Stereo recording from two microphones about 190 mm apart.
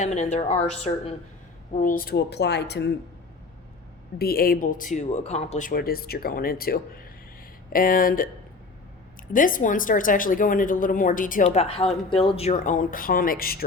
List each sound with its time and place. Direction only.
0.0 s a woman's voice: 40° left (ahead or behind)
1.7 s speech: 45° left (ahead or behind); by 2.9 s 60° left (ahead or behind)
4.2 s a woman's voice: 50° left (ahead or behind)
9.3 s a woman's voice: 45° left (ahead or behind)